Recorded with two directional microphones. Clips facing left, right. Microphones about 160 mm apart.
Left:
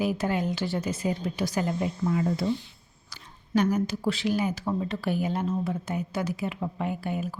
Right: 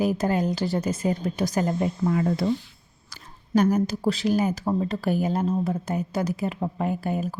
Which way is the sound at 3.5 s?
45° right (ahead or behind).